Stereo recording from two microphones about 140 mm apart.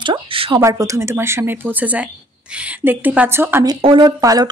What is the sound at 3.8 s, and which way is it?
Speech, 35° right (ahead or behind).